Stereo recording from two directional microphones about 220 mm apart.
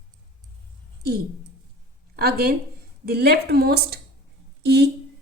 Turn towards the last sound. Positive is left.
turn(degrees=-50)  # may be behind; listen again after turning